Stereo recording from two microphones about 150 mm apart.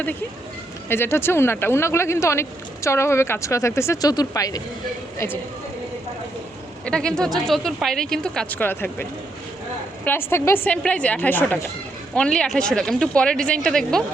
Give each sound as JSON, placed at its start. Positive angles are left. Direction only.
{"t": 0.9, "sound": "speech", "side_deg": 15}
{"t": 6.8, "sound": "speech", "side_deg": 5}